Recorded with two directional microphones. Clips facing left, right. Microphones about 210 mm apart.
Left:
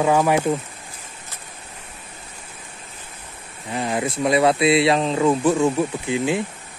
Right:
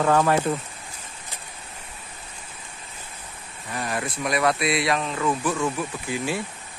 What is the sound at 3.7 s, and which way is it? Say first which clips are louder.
Speech: left 6 dB; 25° left (ahead or behind).